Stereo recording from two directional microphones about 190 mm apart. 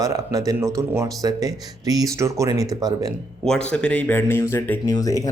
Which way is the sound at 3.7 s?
5° left (ahead or behind).